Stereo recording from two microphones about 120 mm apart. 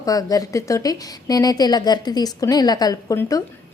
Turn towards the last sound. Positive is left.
turn(degrees=30)  # may be behind; listen again after turning